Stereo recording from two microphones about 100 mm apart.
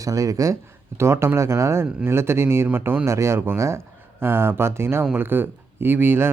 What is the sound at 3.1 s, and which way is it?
A man's voice, 30° right (ahead or behind).